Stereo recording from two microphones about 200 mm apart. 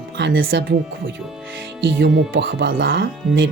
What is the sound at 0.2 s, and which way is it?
Speech, 65° right (ahead or behind).